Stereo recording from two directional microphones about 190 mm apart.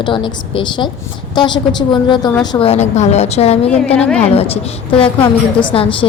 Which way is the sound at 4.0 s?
5° left (ahead or behind).